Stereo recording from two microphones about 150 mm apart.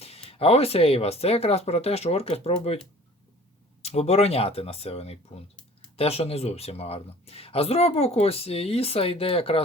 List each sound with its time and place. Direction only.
0.0 s speech: 40° left (ahead or behind)
3.8 s speech: 45° left (ahead or behind)